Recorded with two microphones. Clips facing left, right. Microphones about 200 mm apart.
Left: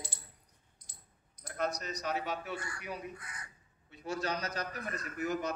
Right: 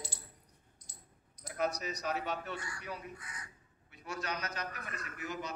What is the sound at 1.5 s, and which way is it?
Speech, 5° right (ahead or behind).